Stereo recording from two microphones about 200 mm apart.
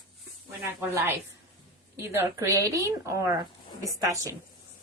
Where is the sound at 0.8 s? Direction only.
10° right (ahead or behind).